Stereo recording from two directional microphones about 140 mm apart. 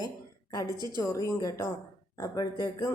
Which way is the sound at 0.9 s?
20° left (ahead or behind).